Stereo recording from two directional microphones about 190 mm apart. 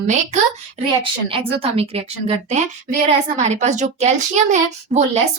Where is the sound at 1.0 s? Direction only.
30° right (ahead or behind).